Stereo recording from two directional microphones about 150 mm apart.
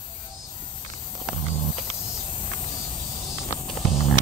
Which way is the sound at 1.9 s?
10° left (ahead or behind).